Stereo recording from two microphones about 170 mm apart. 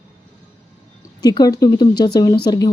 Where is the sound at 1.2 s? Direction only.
20° left (ahead or behind).